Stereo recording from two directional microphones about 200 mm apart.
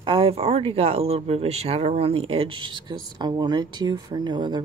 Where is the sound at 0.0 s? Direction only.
25° right (ahead or behind).